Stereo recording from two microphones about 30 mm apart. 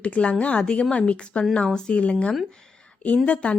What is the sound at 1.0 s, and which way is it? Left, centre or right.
Speech, left.